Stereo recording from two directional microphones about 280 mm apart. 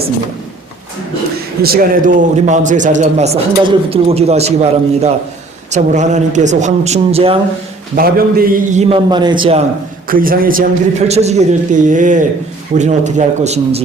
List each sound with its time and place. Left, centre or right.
1.6 s a man's voice: right
7.9 s a man's voice: right
10.1 s a man's voice: right